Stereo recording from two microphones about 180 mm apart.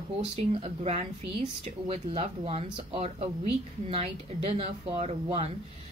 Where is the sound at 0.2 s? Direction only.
35° right (ahead or behind).